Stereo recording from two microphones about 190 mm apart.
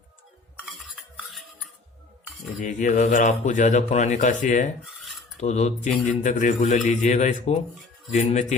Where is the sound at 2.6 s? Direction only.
40° left (ahead or behind).